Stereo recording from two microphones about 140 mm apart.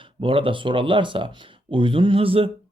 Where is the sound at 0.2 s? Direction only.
40° right (ahead or behind).